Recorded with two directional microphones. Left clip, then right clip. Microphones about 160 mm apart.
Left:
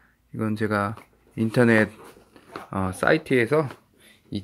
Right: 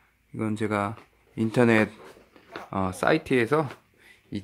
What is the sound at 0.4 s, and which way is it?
Speech, 5° right (ahead or behind).